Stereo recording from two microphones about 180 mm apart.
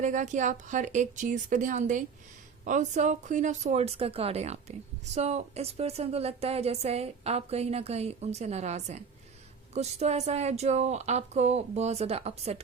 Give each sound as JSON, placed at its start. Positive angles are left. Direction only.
{"t": 0.0, "sound": "a woman's voice", "side_deg": -45}